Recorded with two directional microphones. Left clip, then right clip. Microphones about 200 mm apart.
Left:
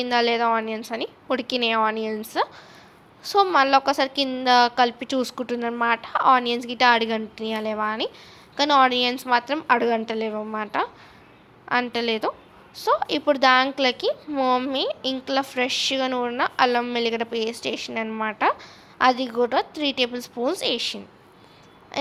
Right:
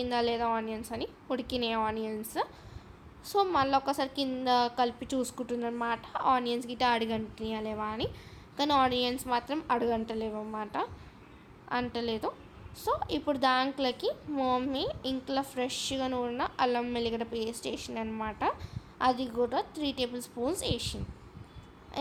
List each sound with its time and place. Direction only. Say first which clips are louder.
0.0 s a woman's voice: left 9 dB; 15° left (ahead or behind)